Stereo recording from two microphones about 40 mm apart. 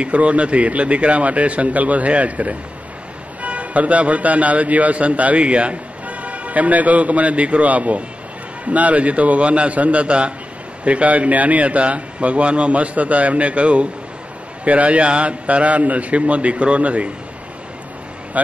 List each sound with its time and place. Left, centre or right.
0.0 s a man's voice: right